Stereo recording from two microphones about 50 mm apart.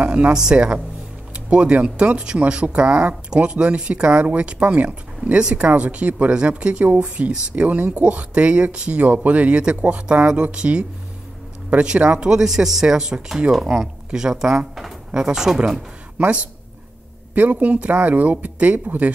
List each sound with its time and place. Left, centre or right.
0.0 s speech: right
0.3 s speech: centre
17.3 s speech: right